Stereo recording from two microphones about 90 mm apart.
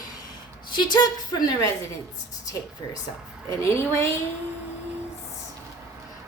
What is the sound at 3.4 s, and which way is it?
Speech, 30° left (ahead or behind).